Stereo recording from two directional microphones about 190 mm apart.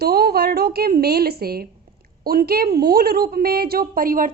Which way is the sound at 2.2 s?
50° right (ahead or behind).